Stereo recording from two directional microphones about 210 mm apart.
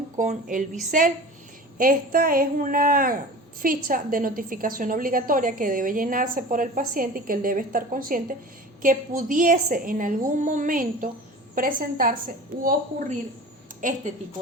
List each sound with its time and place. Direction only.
0.2 s a woman's voice: 40° right (ahead or behind)
13.8 s a woman's voice: 40° right (ahead or behind)